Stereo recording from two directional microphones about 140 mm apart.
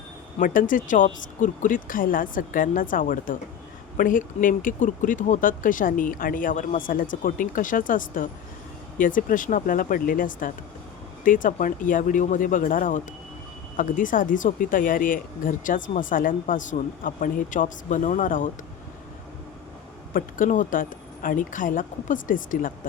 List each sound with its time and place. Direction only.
0.3 s speech: 75° left (ahead or behind)
20.1 s speech: 70° left (ahead or behind)